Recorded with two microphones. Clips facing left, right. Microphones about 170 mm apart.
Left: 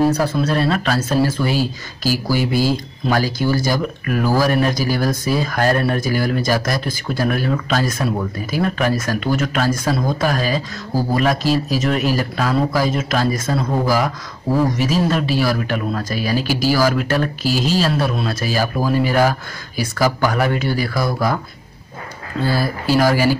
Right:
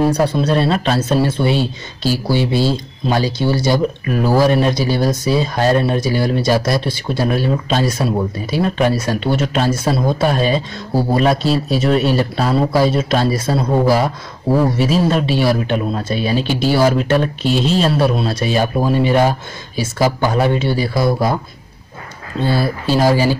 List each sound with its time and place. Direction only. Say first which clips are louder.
0.1 s a man's voice: right 3 dB; 30° right (ahead or behind)
22.4 s speech: right 2 dB; 25° right (ahead or behind)